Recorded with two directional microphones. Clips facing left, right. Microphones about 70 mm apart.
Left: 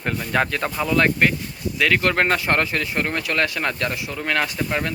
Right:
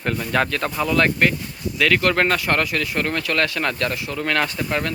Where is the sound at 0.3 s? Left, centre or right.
Centre.